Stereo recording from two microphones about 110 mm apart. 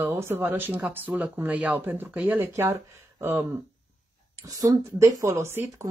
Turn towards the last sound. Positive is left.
turn(degrees=-20)  # may be behind; listen again after turning